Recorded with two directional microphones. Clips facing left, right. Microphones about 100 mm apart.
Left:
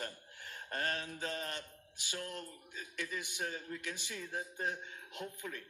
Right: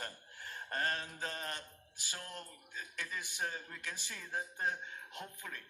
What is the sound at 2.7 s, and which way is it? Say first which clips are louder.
A man's voice: left 1 dB; 40° right (ahead or behind).